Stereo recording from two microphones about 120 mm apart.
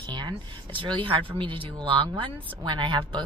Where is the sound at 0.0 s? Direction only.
40° right (ahead or behind).